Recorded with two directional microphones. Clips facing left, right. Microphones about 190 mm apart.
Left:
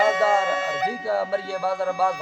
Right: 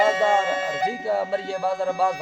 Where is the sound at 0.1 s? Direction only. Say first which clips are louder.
Even; 25° right (ahead or behind).